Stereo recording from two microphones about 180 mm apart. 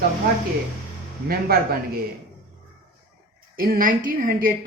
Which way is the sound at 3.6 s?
55° right (ahead or behind).